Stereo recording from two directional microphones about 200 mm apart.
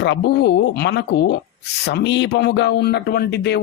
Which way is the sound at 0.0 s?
60° left (ahead or behind).